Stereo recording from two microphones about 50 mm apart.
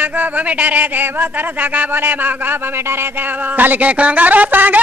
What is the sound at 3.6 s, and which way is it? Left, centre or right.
Speech, right.